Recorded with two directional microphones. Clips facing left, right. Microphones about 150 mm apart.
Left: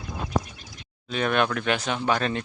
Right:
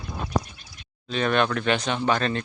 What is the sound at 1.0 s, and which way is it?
Speech, 5° left (ahead or behind).